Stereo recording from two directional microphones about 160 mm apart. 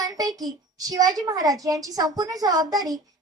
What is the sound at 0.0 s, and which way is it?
A woman's voice, 25° right (ahead or behind).